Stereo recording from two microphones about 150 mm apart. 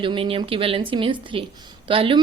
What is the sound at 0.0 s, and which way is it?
A woman's voice, 35° right (ahead or behind).